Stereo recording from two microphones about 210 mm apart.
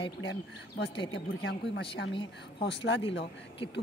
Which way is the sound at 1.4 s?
55° left (ahead or behind).